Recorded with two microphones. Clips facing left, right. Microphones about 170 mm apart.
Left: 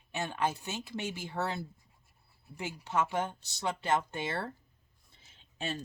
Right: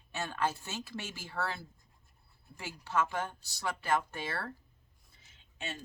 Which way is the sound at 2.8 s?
20° left (ahead or behind).